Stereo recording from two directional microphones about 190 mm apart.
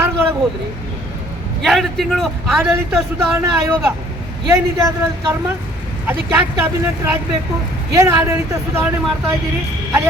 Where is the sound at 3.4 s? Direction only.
15° right (ahead or behind).